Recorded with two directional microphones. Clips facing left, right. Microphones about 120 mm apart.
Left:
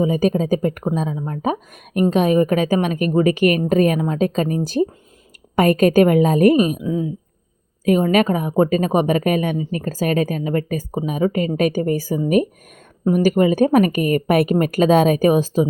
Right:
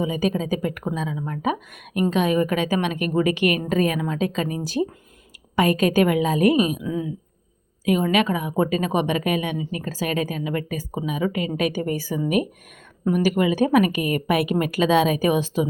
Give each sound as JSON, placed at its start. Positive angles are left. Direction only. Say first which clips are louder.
{"t": 0.0, "sound": "a woman's voice", "louder": "left 6 dB", "side_deg": 40}
{"t": 6.8, "sound": "a woman's voice", "louder": "left 4 dB", "side_deg": 30}
{"t": 7.9, "sound": "a woman's voice", "louder": "left 4 dB", "side_deg": 40}